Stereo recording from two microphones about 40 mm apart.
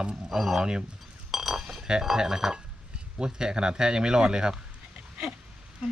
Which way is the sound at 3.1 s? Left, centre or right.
Centre.